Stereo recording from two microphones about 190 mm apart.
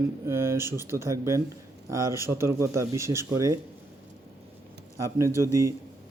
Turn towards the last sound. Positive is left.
turn(degrees=-15)  # may be behind; listen again after turning